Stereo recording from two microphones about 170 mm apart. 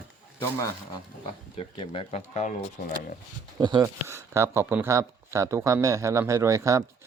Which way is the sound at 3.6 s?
25° right (ahead or behind).